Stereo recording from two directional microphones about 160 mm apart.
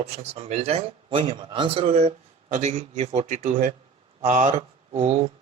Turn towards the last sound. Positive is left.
turn(degrees=-45)  # may be behind; listen again after turning